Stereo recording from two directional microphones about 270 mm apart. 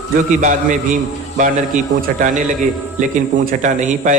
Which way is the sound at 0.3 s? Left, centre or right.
Right.